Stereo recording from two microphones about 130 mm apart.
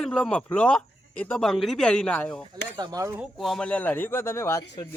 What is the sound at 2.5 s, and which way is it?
Speech, 30° right (ahead or behind).